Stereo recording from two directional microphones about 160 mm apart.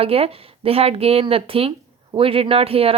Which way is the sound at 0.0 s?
35° right (ahead or behind).